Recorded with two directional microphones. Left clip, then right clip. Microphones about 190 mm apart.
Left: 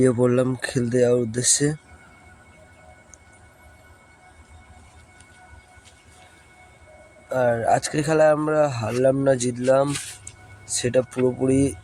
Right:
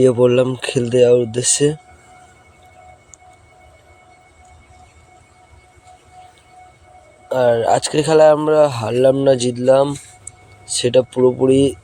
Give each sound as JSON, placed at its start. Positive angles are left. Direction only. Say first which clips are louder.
{"t": 0.0, "sound": "speech", "louder": "right 7 dB", "side_deg": -5}
{"t": 7.3, "sound": "speech", "louder": "right 6 dB", "side_deg": -5}
{"t": 11.5, "sound": "speech", "louder": "right 7 dB", "side_deg": -25}